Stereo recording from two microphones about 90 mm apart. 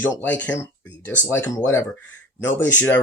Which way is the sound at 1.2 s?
30° left (ahead or behind).